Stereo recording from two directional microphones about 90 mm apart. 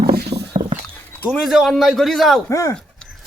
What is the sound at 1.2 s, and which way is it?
Speech, centre (ahead or behind).